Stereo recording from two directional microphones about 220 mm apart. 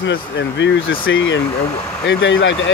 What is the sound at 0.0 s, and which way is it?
Speech, 55° left (ahead or behind).